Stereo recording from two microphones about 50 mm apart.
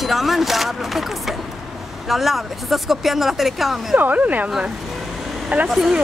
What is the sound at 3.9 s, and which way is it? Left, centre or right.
Speech, right.